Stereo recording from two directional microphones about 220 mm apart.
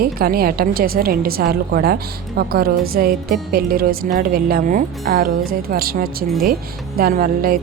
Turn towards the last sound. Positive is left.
turn(degrees=-40)  # may be behind; listen again after turning